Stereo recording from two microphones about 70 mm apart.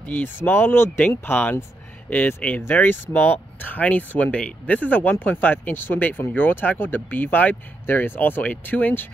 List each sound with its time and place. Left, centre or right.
0.0 s speech: left